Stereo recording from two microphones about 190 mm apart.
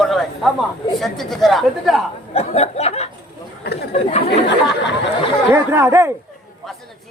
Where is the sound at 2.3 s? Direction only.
35° left (ahead or behind).